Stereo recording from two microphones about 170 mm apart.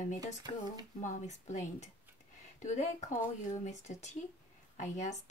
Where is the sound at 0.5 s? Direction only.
45° left (ahead or behind).